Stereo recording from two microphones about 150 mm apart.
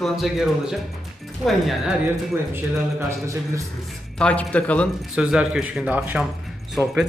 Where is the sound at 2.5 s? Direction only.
20° right (ahead or behind).